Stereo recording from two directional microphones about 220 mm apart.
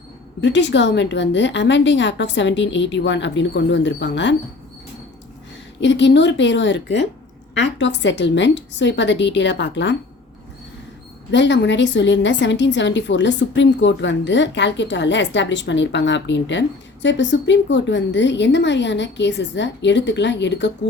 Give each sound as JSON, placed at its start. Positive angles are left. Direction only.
{"t": 0.4, "sound": "a woman's voice", "side_deg": 55}
{"t": 5.8, "sound": "a woman's voice", "side_deg": 55}
{"t": 11.3, "sound": "a woman's voice", "side_deg": 55}